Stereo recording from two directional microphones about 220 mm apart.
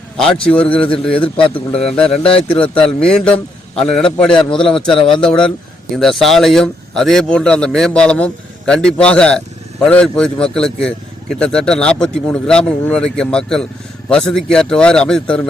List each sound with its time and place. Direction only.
0.2 s speech: 5° left (ahead or behind)
2.2 s a man's voice: 25° left (ahead or behind)
2.8 s a man's voice: 5° left (ahead or behind)